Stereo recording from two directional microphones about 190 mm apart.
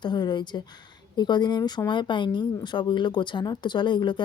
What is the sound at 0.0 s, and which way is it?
Speech, 25° left (ahead or behind).